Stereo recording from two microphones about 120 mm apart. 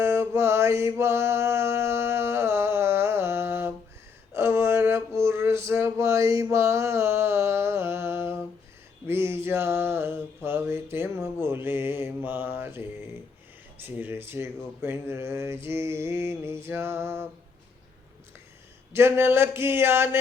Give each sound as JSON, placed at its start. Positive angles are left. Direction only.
{"t": 0.0, "sound": "mantra", "side_deg": -20}
{"t": 4.4, "sound": "a sound", "side_deg": -20}
{"t": 13.8, "sound": "speech", "side_deg": -20}
{"t": 18.9, "sound": "speech", "side_deg": -20}